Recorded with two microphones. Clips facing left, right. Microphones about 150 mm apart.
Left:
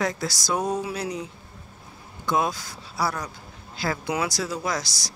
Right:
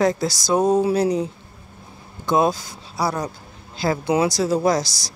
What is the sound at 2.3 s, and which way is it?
Speech, 25° right (ahead or behind).